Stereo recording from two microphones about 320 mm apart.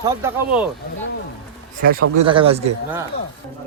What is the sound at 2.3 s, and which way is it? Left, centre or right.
Speech, centre.